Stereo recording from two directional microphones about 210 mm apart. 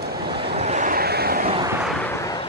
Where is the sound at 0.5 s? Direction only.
30° right (ahead or behind); by 1.4 s 45° right (ahead or behind).